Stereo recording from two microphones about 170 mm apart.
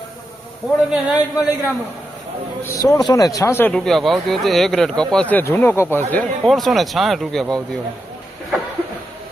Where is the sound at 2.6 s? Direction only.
15° left (ahead or behind).